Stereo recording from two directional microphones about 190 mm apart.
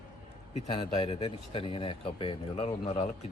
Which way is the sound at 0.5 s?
30° left (ahead or behind).